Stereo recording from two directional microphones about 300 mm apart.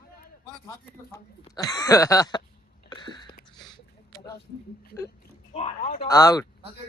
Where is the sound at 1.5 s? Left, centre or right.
Centre.